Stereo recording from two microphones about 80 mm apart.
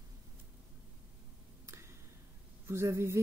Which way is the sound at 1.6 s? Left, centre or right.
Right.